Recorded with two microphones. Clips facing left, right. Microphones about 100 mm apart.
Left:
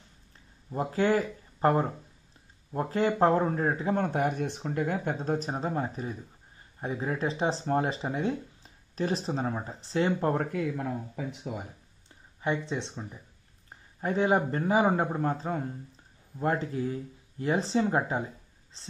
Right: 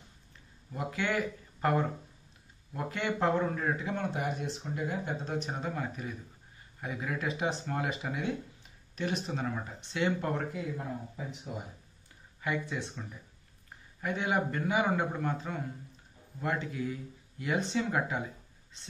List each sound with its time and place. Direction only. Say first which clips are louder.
0.7 s speech: left 7 dB; 35° left (ahead or behind)
10.4 s speech: left 6 dB; 60° left (ahead or behind)
12.4 s speech: left 4 dB; 25° left (ahead or behind)